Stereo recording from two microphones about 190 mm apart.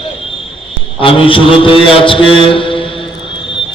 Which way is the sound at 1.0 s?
30° left (ahead or behind).